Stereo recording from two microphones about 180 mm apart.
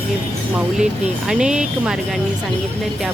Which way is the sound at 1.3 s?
5° right (ahead or behind).